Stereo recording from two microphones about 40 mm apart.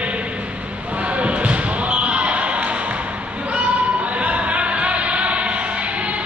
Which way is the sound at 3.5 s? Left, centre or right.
Right.